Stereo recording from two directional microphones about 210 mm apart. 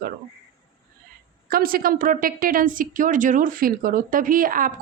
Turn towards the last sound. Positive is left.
turn(degrees=-40)  # may be behind; listen again after turning